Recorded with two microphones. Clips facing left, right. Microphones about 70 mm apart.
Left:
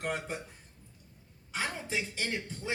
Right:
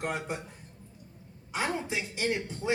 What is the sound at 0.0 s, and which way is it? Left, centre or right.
Speech, centre.